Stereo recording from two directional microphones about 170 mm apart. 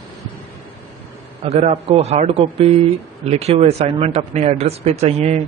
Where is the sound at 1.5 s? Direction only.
35° right (ahead or behind).